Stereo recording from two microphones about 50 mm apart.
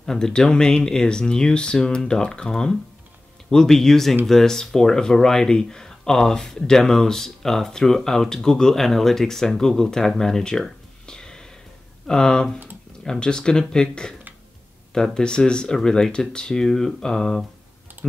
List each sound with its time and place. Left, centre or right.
0.0 s speech: centre